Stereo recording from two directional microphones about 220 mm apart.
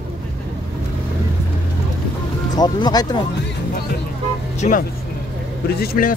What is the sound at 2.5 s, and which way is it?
Speech, 20° left (ahead or behind).